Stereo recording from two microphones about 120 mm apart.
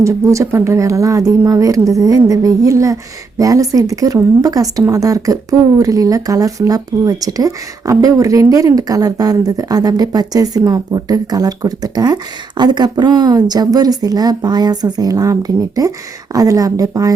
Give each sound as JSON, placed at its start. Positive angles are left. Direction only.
{"t": 0.0, "sound": "speech", "side_deg": -25}